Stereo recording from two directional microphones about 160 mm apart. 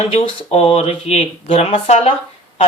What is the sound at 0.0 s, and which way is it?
Speech, 40° left (ahead or behind).